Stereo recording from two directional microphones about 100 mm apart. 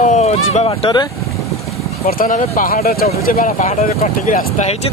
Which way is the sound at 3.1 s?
90° left.